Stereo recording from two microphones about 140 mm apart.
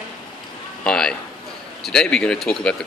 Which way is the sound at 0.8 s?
5° left (ahead or behind).